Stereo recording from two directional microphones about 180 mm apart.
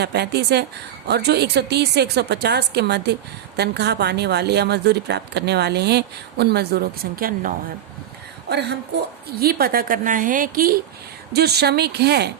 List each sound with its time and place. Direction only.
0.0 s speech: 65° right (ahead or behind)
8.4 s a woman's voice: 65° right (ahead or behind)